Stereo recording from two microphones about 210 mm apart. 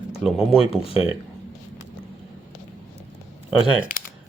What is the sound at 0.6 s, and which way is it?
Speech, 25° left (ahead or behind).